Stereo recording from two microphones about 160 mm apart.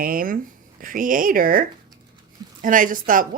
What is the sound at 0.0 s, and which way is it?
Speech, 60° right (ahead or behind).